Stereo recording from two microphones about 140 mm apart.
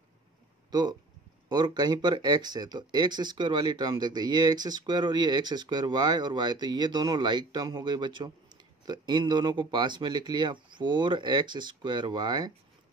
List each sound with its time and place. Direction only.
0.7 s speech: 30° right (ahead or behind)